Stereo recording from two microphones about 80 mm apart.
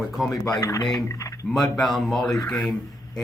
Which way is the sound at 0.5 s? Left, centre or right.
Left.